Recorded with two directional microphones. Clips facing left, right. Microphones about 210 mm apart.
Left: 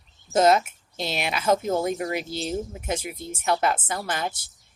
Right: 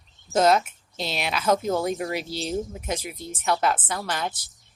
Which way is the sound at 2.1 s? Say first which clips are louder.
Even; 50° left (ahead or behind).